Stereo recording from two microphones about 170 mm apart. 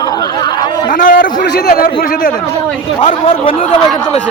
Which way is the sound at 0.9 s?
55° left (ahead or behind).